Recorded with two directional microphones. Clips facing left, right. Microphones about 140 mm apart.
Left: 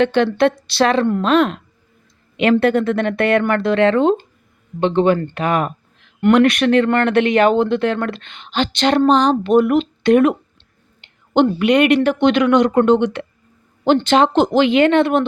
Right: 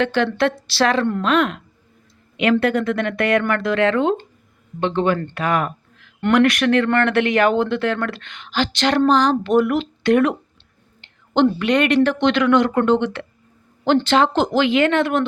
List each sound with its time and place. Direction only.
0.0 s speech: 20° left (ahead or behind)
11.0 s a sound: 15° left (ahead or behind)
11.6 s speech: 15° left (ahead or behind)